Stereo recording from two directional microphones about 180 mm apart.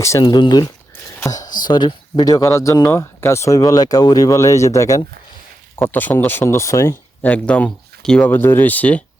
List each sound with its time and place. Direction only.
0.0 s speech: 20° left (ahead or behind)
1.2 s a sound: 20° left (ahead or behind)
1.6 s speech: 25° left (ahead or behind); by 9.0 s 10° left (ahead or behind)